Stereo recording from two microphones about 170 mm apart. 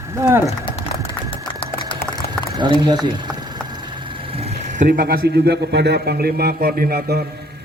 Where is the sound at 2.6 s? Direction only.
25° right (ahead or behind).